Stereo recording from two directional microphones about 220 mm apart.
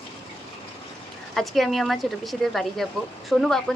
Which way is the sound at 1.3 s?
Centre (ahead or behind).